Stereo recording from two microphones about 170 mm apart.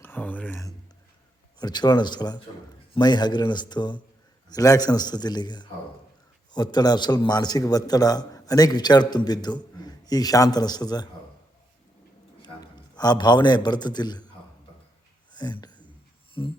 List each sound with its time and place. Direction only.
0.0 s speech: 10° left (ahead or behind)
1.5 s a man's voice: 25° left (ahead or behind)
12.4 s a man's voice: 20° left (ahead or behind)